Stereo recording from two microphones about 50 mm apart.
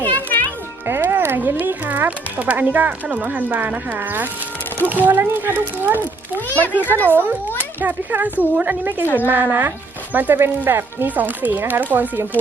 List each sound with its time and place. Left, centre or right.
0.0 s music: left
0.9 s music: right
1.5 s speech: right
6.5 s a child's voice: left
7.8 s speech: right
10.7 s speech: right
11.0 s speech: right